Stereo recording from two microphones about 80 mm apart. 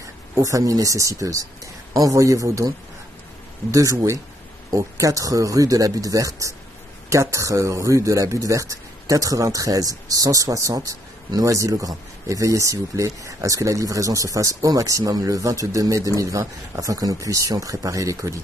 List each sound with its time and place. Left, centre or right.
0.0 s a man's voice: right
3.7 s a man's voice: right